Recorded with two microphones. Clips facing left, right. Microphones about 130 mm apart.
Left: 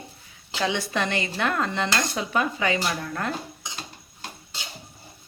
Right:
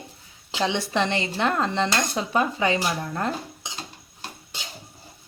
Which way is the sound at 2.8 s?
15° right (ahead or behind).